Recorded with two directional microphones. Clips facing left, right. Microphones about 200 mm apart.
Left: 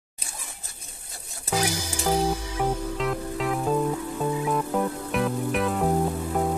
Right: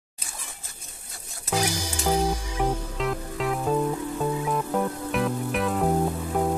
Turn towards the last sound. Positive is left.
turn(degrees=0)  # may be behind; listen again after turning